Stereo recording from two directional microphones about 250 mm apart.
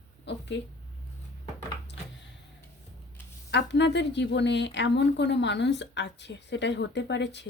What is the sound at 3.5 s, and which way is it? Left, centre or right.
A woman's voice, left.